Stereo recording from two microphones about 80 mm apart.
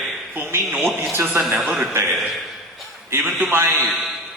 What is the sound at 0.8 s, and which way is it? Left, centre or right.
Speech, right.